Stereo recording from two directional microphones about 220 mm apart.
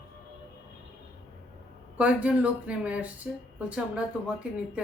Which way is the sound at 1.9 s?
5° right (ahead or behind).